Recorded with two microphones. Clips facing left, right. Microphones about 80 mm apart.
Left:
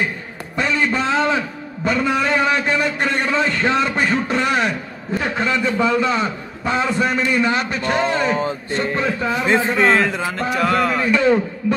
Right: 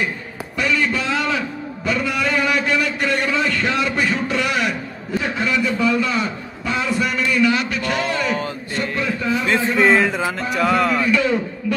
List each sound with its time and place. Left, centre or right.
0.6 s a sound: left
5.4 s a man's voice: left
9.8 s speech: centre
11.1 s a man's voice: left